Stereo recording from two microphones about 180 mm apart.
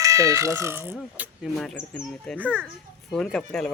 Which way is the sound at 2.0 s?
5° left (ahead or behind).